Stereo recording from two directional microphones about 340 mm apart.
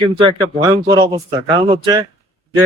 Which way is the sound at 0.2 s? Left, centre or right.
Centre.